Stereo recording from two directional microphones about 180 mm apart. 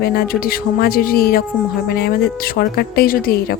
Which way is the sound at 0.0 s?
60° left (ahead or behind).